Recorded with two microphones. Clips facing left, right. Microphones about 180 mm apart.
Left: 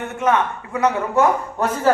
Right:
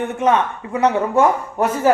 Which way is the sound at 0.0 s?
15° right (ahead or behind).